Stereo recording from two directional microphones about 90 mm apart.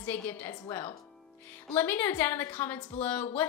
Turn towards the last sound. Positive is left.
turn(degrees=20)  # may be behind; listen again after turning